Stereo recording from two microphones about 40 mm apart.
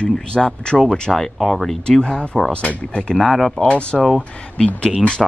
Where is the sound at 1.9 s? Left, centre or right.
Left.